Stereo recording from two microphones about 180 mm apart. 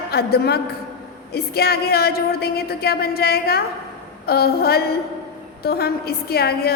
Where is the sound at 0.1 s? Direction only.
60° left (ahead or behind).